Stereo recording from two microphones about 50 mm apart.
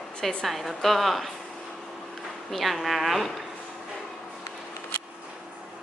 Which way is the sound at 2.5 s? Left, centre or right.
Centre.